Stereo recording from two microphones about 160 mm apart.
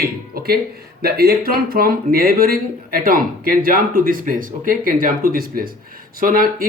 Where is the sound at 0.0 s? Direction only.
75° right (ahead or behind).